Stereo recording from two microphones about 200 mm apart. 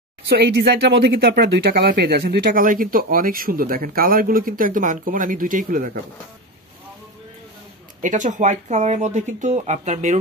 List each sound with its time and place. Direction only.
0.3 s speech: 55° right (ahead or behind)
8.0 s speech: 40° right (ahead or behind)